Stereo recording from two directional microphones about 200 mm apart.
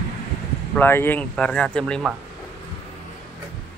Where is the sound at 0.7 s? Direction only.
10° left (ahead or behind).